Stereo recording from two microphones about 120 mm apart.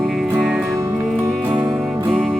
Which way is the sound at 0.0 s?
Centre (ahead or behind).